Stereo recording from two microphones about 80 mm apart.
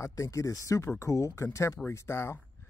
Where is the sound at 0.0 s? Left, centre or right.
Left.